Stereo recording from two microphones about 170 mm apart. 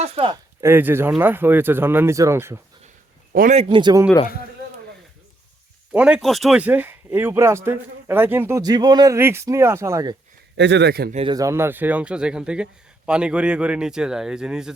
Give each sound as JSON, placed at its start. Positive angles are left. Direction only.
{"t": 0.0, "sound": "speech", "side_deg": -35}
{"t": 0.6, "sound": "speech", "side_deg": -10}
{"t": 3.5, "sound": "speech", "side_deg": -35}
{"t": 5.9, "sound": "speech", "side_deg": -5}
{"t": 10.6, "sound": "speech", "side_deg": -90}
{"t": 11.1, "sound": "speech", "side_deg": -35}
{"t": 11.3, "sound": "a man's voice", "side_deg": -15}